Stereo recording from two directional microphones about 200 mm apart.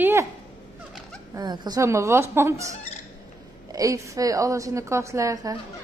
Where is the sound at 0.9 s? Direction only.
Centre (ahead or behind).